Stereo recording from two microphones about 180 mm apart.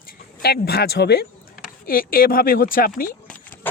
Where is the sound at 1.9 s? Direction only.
55° left (ahead or behind).